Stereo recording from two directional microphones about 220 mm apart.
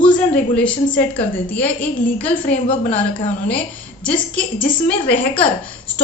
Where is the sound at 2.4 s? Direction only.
30° left (ahead or behind).